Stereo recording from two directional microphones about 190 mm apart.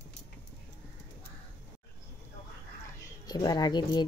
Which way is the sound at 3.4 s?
20° left (ahead or behind).